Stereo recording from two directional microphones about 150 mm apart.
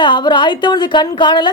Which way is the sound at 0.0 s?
30° left (ahead or behind).